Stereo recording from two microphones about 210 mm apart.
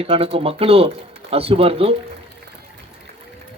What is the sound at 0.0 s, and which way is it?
A man's voice, 30° right (ahead or behind).